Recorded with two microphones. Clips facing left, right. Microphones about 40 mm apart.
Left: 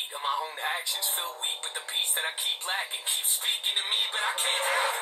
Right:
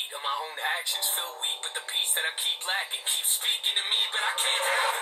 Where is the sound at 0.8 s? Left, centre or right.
Right.